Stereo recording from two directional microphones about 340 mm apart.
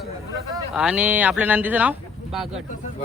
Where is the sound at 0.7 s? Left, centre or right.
Centre.